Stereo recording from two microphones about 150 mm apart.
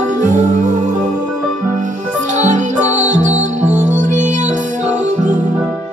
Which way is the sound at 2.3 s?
55° right (ahead or behind).